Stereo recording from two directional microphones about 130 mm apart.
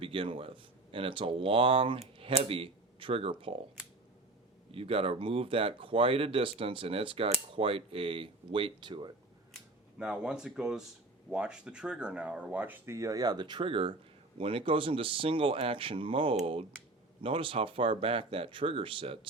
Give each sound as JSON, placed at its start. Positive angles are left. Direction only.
{"t": 0.0, "sound": "speech", "side_deg": -45}
{"t": 4.7, "sound": "speech", "side_deg": -45}
{"t": 10.0, "sound": "speech", "side_deg": -5}